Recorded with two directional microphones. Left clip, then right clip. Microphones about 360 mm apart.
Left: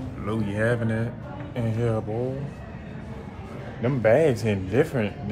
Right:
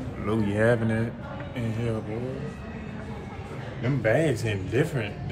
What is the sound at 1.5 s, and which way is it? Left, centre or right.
Speech, centre.